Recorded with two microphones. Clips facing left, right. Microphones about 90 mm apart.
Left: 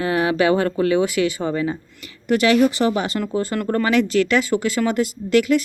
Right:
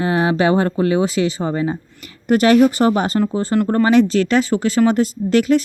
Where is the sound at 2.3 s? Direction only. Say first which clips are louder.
Right 4 dB; 40° right (ahead or behind).